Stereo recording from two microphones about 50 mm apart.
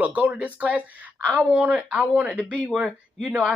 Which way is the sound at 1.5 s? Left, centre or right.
Right.